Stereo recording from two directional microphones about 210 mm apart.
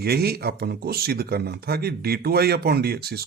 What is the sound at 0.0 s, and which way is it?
Speech, 50° right (ahead or behind).